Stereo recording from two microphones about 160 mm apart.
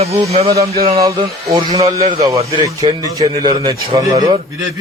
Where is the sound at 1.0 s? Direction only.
20° right (ahead or behind).